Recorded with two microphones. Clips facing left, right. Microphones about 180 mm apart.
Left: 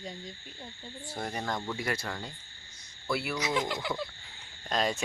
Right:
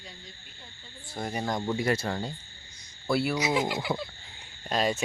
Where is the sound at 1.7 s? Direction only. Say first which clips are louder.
Right 6 dB; 25° right (ahead or behind).